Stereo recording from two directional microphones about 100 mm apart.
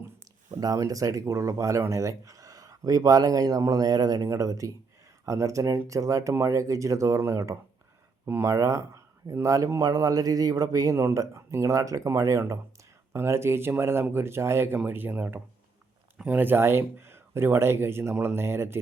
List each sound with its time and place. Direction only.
0.6 s speech: 35° right (ahead or behind)